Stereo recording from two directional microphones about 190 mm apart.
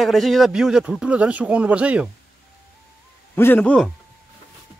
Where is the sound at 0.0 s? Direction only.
Centre (ahead or behind).